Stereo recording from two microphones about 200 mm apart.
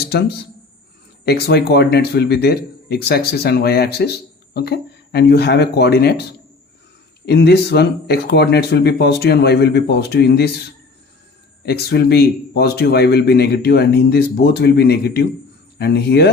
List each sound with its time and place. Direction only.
0.0 s a sound: 55° left (ahead or behind)
1.2 s speech: 55° left (ahead or behind)
11.6 s speech: 55° left (ahead or behind)